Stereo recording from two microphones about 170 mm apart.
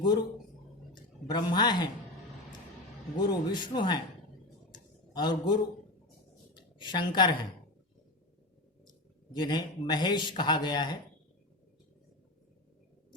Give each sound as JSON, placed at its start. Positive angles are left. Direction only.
{"t": 0.0, "sound": "speech", "side_deg": 25}
{"t": 1.3, "sound": "speech", "side_deg": 25}
{"t": 3.2, "sound": "speech", "side_deg": 25}
{"t": 4.7, "sound": "a sound", "side_deg": 25}
{"t": 6.5, "sound": "a woman's voice", "side_deg": 25}
{"t": 9.4, "sound": "speech", "side_deg": 25}